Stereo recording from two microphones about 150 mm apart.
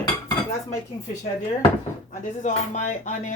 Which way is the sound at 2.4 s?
55° left (ahead or behind).